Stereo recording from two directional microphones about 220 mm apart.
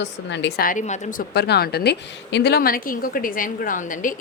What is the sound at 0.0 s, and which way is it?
A woman's voice, 55° left (ahead or behind).